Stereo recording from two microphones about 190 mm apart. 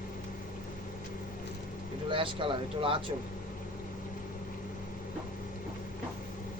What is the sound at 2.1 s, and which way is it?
Speech, 25° right (ahead or behind).